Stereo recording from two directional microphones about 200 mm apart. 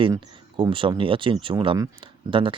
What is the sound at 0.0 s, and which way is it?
Speech, 25° right (ahead or behind).